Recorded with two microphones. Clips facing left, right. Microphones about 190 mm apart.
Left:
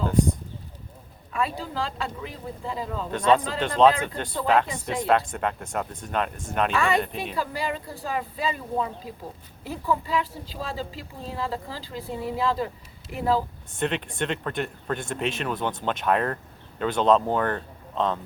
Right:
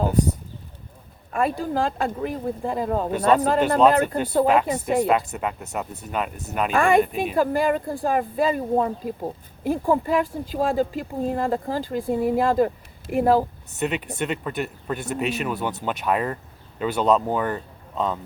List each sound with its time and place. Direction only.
1.3 s speech: 50° right (ahead or behind)
4.4 s speech: 10° right (ahead or behind)
4.7 s speech: 45° right (ahead or behind)
5.0 s speech: 5° right (ahead or behind)
6.7 s speech: 50° right (ahead or behind)
13.7 s speech: 5° right (ahead or behind)